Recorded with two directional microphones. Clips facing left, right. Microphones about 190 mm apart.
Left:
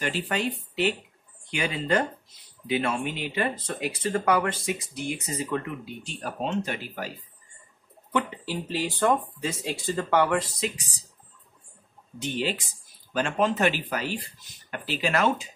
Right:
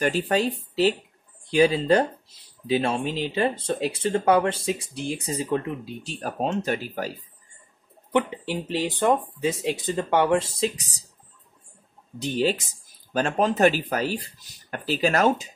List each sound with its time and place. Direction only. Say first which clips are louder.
0.0 s speech: right 6 dB; 40° right (ahead or behind)
8.1 s speech: right 4 dB; 20° right (ahead or behind)
12.2 s speech: right 5 dB; 40° right (ahead or behind)